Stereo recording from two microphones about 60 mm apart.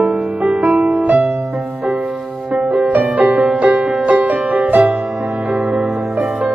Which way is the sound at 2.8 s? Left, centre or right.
Right.